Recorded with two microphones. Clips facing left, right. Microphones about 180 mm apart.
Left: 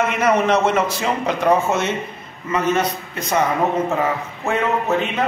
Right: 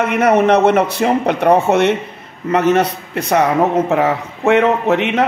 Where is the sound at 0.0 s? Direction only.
60° right (ahead or behind).